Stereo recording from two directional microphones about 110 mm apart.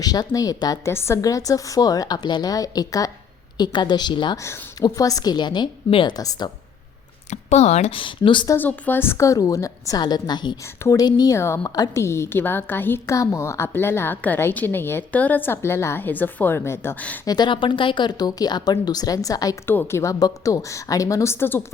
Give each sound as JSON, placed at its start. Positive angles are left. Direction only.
{"t": 0.0, "sound": "speech", "side_deg": 35}
{"t": 0.9, "sound": "speech", "side_deg": 25}
{"t": 4.8, "sound": "speech", "side_deg": 35}
{"t": 6.1, "sound": "speech", "side_deg": 35}
{"t": 7.3, "sound": "a woman's voice", "side_deg": 90}
{"t": 8.5, "sound": "a woman's voice", "side_deg": 15}
{"t": 11.3, "sound": "a woman's voice", "side_deg": 25}
{"t": 11.6, "sound": "speech", "side_deg": 35}
{"t": 12.0, "sound": "a woman's voice", "side_deg": 25}
{"t": 17.2, "sound": "speech", "side_deg": 40}
{"t": 19.6, "sound": "a woman's voice", "side_deg": 20}